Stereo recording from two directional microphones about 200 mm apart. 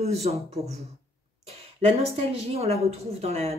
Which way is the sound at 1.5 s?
30° right (ahead or behind).